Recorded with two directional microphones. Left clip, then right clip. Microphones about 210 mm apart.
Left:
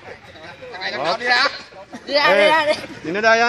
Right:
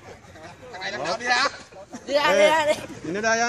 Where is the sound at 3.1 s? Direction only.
20° left (ahead or behind).